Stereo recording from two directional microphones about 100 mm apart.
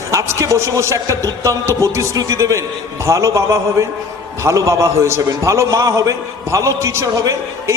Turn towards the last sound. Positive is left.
turn(degrees=-30)  # may be behind; listen again after turning